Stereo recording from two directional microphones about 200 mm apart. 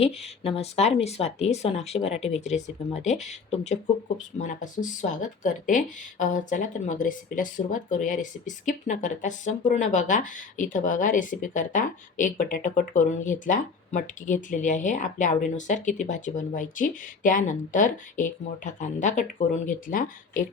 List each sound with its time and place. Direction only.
0.0 s speech: 30° left (ahead or behind)